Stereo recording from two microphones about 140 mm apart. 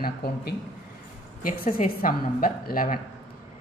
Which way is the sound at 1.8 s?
80° left.